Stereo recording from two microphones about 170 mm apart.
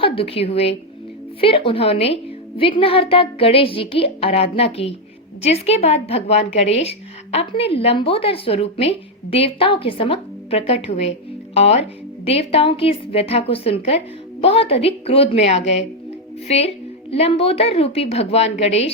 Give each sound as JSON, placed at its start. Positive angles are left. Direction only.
{"t": 0.0, "sound": "a woman's voice", "side_deg": 35}